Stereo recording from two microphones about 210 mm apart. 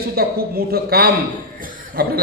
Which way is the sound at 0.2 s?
45° right (ahead or behind).